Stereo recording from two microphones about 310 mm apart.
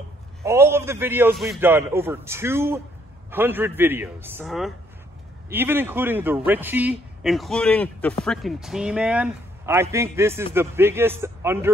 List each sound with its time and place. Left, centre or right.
0.4 s a man's voice: centre